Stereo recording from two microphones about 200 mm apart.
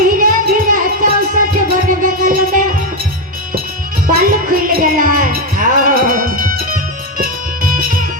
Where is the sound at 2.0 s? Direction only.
45° right (ahead or behind).